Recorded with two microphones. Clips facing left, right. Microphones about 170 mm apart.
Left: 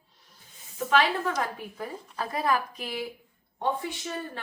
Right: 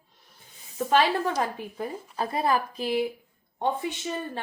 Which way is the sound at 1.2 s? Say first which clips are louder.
Right 2 dB; 30° right (ahead or behind).